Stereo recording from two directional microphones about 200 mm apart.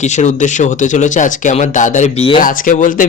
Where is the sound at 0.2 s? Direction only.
35° left (ahead or behind).